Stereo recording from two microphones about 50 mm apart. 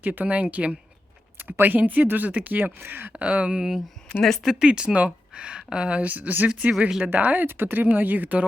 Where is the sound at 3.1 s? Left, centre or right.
Right.